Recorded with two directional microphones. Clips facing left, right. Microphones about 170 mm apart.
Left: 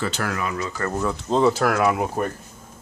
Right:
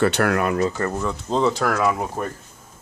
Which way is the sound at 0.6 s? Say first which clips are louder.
Right 7 dB; 35° right (ahead or behind).